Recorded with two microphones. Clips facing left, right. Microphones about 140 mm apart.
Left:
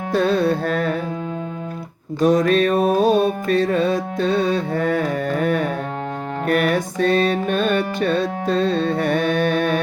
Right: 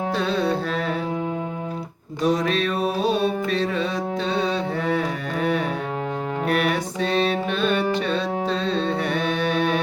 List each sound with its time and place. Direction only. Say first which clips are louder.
0.1 s music: left 7 dB; 50° left (ahead or behind)
2.2 s music: left 6 dB; 50° left (ahead or behind)